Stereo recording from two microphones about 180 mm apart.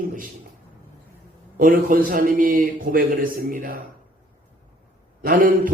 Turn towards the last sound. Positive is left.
turn(degrees=-50)  # may be behind; listen again after turning